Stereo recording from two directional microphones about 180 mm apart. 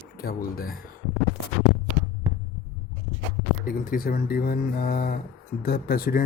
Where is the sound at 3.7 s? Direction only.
50° left (ahead or behind).